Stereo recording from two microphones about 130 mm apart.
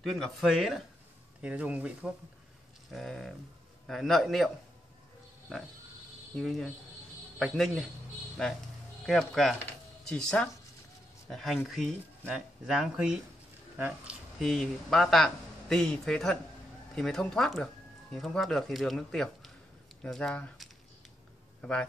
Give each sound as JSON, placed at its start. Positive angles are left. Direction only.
{"t": 0.0, "sound": "speech", "side_deg": 0}
{"t": 2.9, "sound": "speech", "side_deg": 0}
{"t": 6.3, "sound": "speech", "side_deg": 0}
{"t": 14.4, "sound": "speech", "side_deg": 0}